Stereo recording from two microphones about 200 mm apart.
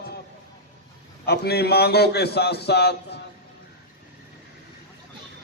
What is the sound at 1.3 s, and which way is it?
A man's voice, 55° left (ahead or behind).